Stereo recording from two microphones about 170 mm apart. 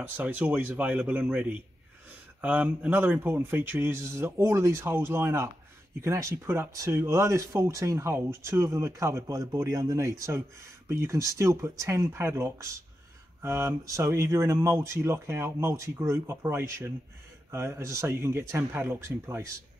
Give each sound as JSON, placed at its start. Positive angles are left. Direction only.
{"t": 0.0, "sound": "speech", "side_deg": -10}